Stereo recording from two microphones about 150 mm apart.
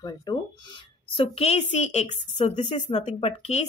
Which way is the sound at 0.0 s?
25° left (ahead or behind).